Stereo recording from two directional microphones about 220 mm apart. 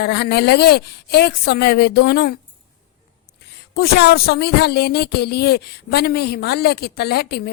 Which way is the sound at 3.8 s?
45° left (ahead or behind).